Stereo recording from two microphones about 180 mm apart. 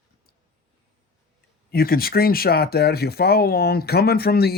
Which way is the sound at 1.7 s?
60° left (ahead or behind).